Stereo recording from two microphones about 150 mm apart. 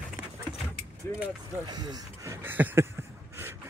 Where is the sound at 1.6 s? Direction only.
25° right (ahead or behind).